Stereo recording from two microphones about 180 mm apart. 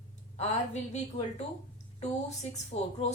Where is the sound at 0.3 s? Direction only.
40° left (ahead or behind).